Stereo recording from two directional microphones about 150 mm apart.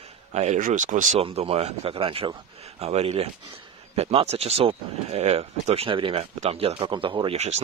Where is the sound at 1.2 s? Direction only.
40° right (ahead or behind).